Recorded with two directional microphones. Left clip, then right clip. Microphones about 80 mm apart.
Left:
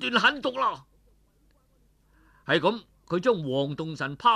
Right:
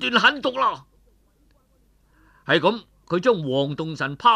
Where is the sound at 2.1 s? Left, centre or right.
Right.